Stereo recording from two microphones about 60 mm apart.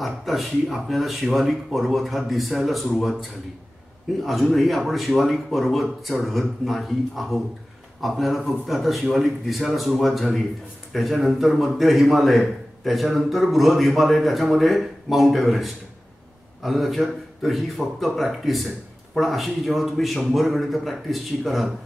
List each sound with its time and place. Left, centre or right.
0.0 s a man's voice: centre